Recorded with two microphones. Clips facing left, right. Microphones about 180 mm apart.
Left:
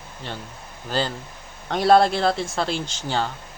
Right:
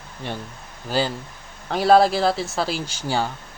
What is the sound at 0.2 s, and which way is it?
Speech, 15° right (ahead or behind).